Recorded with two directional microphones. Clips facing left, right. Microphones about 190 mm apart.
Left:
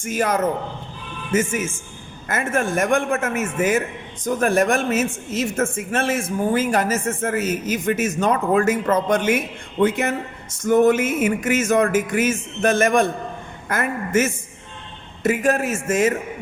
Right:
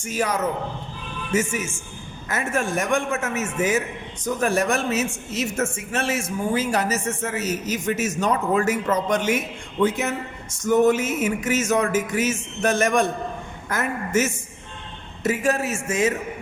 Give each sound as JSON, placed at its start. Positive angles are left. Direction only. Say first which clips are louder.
{"t": 0.0, "sound": "a man's voice", "louder": "left 3 dB", "side_deg": 50}
{"t": 9.8, "sound": "music", "louder": "left 3 dB", "side_deg": 55}
{"t": 15.2, "sound": "a man's voice", "louder": "left 3 dB", "side_deg": 55}